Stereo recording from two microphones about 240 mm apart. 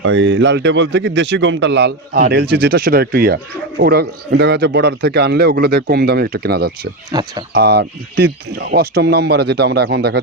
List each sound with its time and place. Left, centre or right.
0.0 s speech: right
7.1 s speech: centre
7.5 s speech: right